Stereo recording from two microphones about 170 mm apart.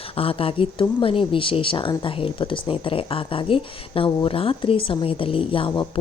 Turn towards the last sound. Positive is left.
turn(degrees=30)  # may be behind; listen again after turning